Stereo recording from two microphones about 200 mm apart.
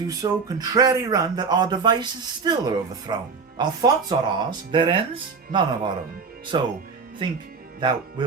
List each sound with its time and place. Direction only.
0.1 s speech: 20° right (ahead or behind)